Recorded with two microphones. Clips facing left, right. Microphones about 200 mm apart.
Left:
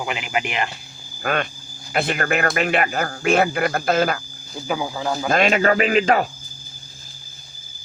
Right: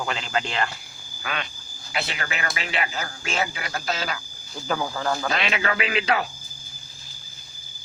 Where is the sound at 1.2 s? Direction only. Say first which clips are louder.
Left 9 dB; 50° left (ahead or behind).